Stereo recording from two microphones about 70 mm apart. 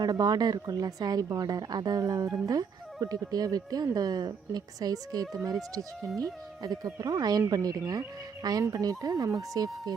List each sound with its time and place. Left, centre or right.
0.0 s speech: right
0.6 s speech: right
7.4 s speech: right